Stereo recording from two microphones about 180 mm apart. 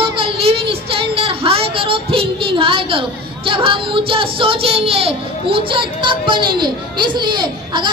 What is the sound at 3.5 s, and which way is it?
Speech, 30° right (ahead or behind).